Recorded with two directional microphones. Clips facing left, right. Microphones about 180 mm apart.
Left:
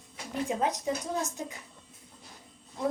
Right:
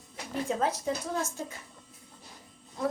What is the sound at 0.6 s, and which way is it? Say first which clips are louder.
Speech: even; 15° left (ahead or behind).